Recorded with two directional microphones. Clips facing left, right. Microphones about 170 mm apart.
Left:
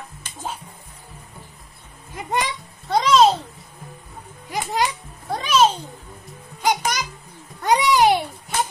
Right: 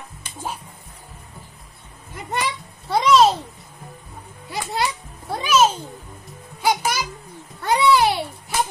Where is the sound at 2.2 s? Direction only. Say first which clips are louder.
Left 3 dB; 15° left (ahead or behind).